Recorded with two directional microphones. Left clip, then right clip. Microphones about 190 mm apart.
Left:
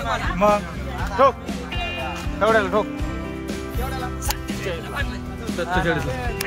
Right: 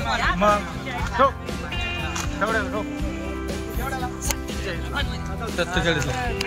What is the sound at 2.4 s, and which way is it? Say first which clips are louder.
Speech: left 6 dB; 70° left (ahead or behind).